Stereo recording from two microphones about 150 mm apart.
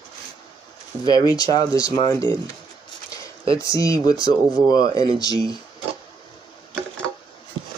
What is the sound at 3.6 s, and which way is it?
Speech, 20° left (ahead or behind).